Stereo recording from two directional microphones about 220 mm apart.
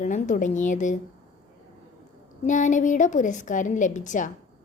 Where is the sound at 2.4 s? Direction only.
35° left (ahead or behind).